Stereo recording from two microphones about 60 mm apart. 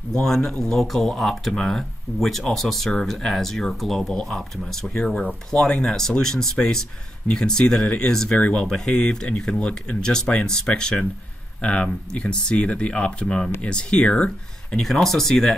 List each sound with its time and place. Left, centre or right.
0.1 s speech: centre
8.4 s speech: left
8.6 s speech: centre
14.8 s speech: centre